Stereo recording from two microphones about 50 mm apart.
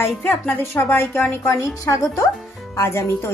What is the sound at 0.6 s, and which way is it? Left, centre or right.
A woman's voice, left.